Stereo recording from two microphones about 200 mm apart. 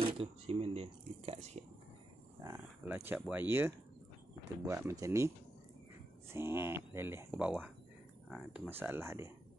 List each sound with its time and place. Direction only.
0.0 s speech: 30° right (ahead or behind)
2.4 s speech: 15° right (ahead or behind)
6.3 s speech: 10° right (ahead or behind)